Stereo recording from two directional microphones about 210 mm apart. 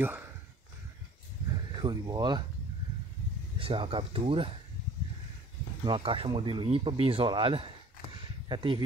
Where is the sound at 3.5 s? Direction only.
25° right (ahead or behind).